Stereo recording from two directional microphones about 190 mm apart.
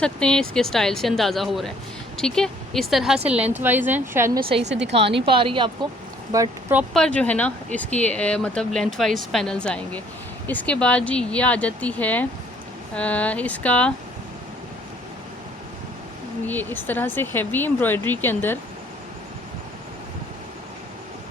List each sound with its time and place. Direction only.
0.0 s a woman's voice: 5° left (ahead or behind); by 4.3 s 10° right (ahead or behind)
4.4 s speech: 30° right (ahead or behind)
6.3 s a woman's voice: 15° right (ahead or behind)
6.9 s speech: 5° left (ahead or behind)
16.5 s speech: 10° left (ahead or behind)